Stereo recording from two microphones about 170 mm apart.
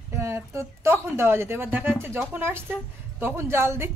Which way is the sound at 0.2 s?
15° right (ahead or behind).